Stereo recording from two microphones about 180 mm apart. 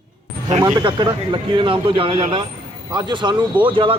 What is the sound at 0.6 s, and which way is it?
A man's voice, 20° right (ahead or behind).